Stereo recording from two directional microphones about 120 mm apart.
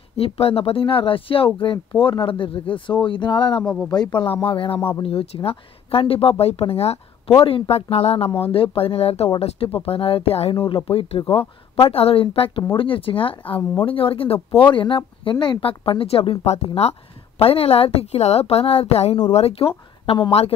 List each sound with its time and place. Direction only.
0.2 s a woman's voice: 55° left (ahead or behind)